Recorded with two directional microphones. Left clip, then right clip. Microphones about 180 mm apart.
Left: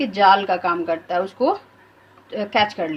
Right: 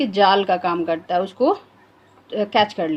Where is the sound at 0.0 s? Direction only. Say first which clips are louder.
Left 1 dB; 40° right (ahead or behind).